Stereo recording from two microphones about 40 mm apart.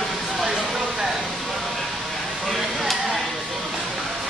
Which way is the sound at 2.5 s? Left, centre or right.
Centre.